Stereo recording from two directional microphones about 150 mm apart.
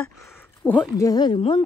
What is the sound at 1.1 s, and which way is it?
Speech, 30° left (ahead or behind).